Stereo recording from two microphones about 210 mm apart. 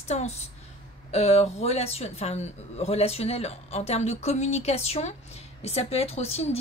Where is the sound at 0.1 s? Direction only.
30° left (ahead or behind).